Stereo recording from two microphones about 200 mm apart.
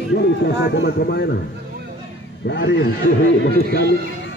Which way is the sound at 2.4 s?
60° left (ahead or behind).